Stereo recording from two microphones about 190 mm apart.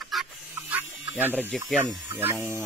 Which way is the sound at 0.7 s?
10° right (ahead or behind).